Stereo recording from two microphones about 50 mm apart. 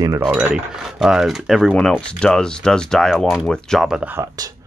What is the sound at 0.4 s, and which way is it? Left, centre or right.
Speech, centre.